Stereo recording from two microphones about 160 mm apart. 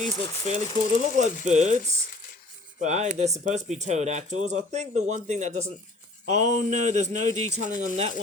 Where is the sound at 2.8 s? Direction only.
45° right (ahead or behind).